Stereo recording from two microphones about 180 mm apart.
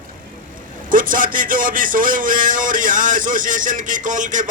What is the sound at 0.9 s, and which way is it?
Speech, 50° right (ahead or behind).